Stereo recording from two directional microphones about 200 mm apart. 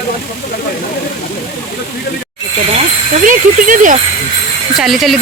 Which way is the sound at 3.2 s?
40° right (ahead or behind).